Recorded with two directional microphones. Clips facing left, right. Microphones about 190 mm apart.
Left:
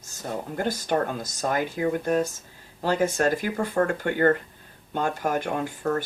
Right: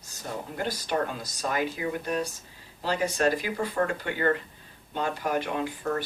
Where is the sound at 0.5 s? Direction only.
45° left (ahead or behind).